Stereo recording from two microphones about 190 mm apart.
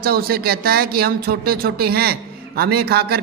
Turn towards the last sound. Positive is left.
turn(degrees=-55)  # may be behind; listen again after turning